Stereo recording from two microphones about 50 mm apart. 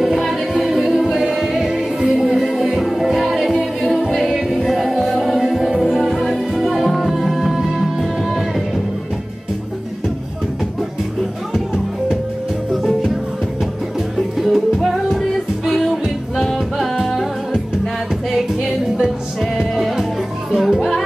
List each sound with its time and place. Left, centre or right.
0.0 s music: centre
14.1 s music: centre
19.5 s music: centre